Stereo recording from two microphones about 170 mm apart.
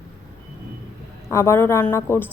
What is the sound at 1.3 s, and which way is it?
Speech, 15° left (ahead or behind).